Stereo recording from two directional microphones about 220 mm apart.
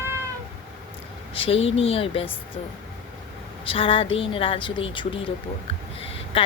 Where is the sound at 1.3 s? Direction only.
25° left (ahead or behind).